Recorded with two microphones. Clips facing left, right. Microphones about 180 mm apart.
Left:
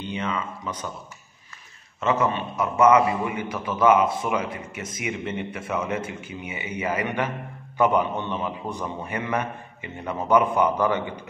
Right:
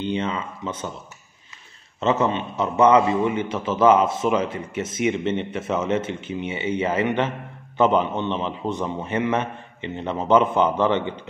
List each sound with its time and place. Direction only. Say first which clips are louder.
0.0 s a man's voice: right 4 dB; 30° right (ahead or behind)
2.0 s a man's voice: right 2 dB; 25° right (ahead or behind)